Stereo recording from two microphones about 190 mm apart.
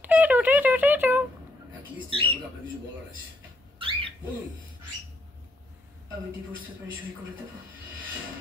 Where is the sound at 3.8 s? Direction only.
30° right (ahead or behind).